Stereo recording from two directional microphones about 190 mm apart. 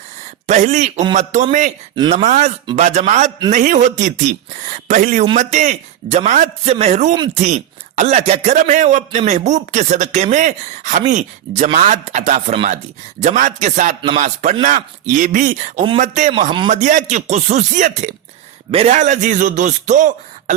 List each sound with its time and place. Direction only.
0.4 s a man's voice: 40° right (ahead or behind)